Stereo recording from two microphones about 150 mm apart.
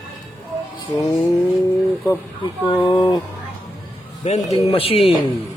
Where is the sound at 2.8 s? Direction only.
30° left (ahead or behind).